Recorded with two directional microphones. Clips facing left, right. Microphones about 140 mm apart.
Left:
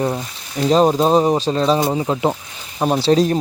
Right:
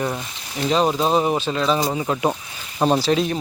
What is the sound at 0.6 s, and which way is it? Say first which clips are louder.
Speech: left 5 dB; 40° left (ahead or behind).